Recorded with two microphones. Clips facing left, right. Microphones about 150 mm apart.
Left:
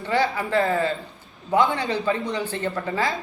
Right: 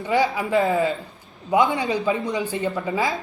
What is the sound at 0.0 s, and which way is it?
A man's voice, 15° right (ahead or behind).